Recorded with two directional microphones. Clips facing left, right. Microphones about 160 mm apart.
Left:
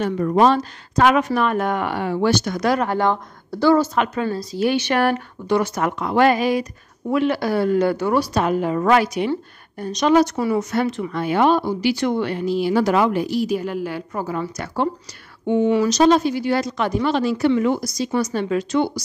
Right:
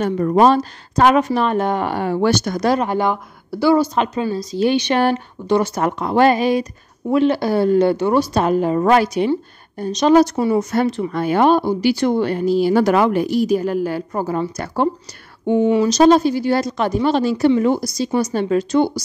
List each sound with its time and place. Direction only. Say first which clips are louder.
0.4 s speech: right 2 dB; 40° right (ahead or behind)
2.8 s a woman's voice: right 1 dB; 15° right (ahead or behind); by 12.7 s 40° right (ahead or behind)
12.7 s a woman's voice: right 3 dB; 55° right (ahead or behind)
15.7 s speech: right 2 dB; 25° right (ahead or behind)
16.0 s speech: right 5 dB; 35° right (ahead or behind)